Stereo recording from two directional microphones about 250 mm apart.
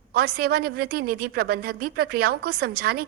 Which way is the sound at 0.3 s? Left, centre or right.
Right.